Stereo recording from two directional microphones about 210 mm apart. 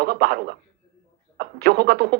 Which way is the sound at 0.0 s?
50° right (ahead or behind).